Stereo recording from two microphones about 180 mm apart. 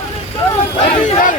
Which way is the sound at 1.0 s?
45° left (ahead or behind).